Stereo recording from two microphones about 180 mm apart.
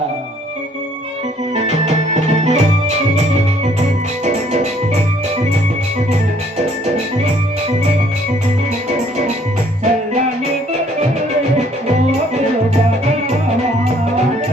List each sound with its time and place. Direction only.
1.5 s music: 40° right (ahead or behind)
4.2 s music: 40° right (ahead or behind)